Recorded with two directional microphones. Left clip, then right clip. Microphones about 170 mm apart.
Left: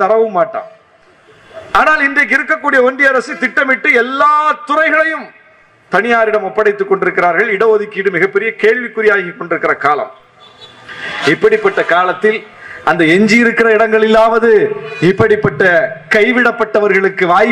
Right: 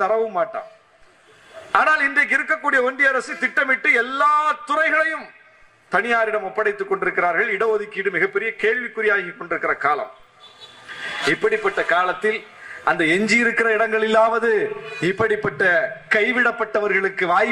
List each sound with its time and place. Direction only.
0.0 s a man's voice: 10° left (ahead or behind)
1.7 s a man's voice: 15° left (ahead or behind)
10.9 s a sound: 10° left (ahead or behind)
11.4 s a man's voice: 15° left (ahead or behind)